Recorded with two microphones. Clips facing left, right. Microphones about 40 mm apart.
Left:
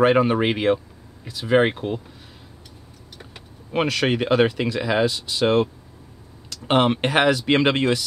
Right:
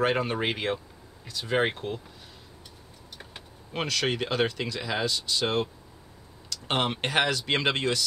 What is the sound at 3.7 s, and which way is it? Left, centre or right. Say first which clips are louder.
Speech: left 7 dB; centre.